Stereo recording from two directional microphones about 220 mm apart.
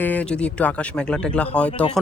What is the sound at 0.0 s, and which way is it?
A man's voice, 5° left (ahead or behind).